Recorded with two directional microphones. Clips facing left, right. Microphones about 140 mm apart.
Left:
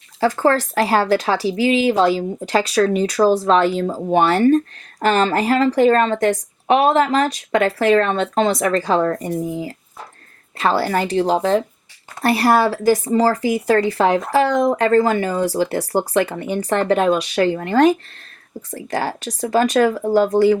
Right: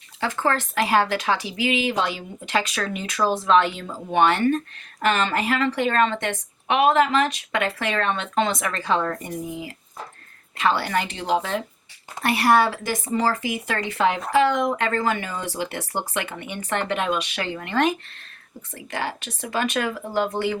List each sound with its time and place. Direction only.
0.2 s speech: 40° left (ahead or behind)